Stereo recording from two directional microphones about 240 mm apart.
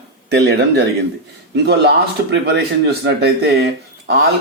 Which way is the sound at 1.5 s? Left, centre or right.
Right.